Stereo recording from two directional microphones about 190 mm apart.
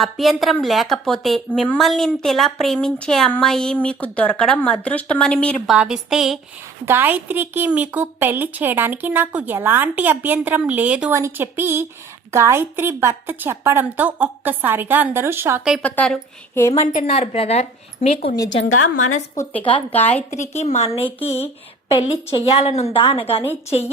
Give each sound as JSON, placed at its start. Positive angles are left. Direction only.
{"t": 0.0, "sound": "a woman's voice", "side_deg": 0}
{"t": 5.7, "sound": "a woman's voice", "side_deg": -5}
{"t": 15.8, "sound": "a woman's voice", "side_deg": 5}
{"t": 16.7, "sound": "a woman's voice", "side_deg": 40}
{"t": 19.9, "sound": "a woman's voice", "side_deg": 10}
{"t": 20.5, "sound": "a woman's voice", "side_deg": 35}